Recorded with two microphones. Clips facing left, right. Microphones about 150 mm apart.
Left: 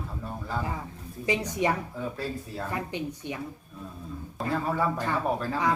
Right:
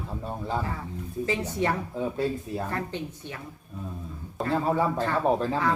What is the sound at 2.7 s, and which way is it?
Speech, 15° left (ahead or behind).